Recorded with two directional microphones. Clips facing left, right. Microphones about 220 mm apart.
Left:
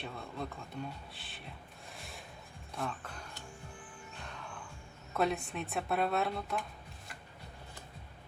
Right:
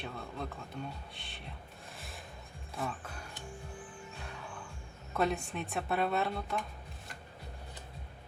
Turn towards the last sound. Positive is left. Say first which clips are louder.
# even
turn(degrees=0)  # may be behind; listen again after turning